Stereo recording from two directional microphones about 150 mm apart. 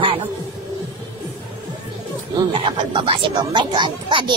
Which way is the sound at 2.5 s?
35° right (ahead or behind).